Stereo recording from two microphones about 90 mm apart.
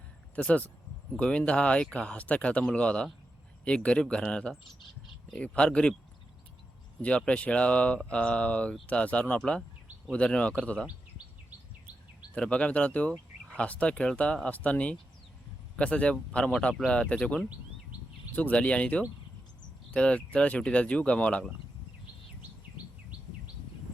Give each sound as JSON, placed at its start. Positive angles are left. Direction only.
{"t": 0.3, "sound": "speech", "side_deg": 15}
{"t": 7.0, "sound": "speech", "side_deg": 10}
{"t": 12.3, "sound": "speech", "side_deg": 15}